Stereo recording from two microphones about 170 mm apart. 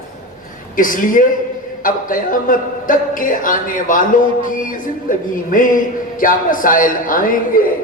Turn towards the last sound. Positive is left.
turn(degrees=55)  # may be behind; listen again after turning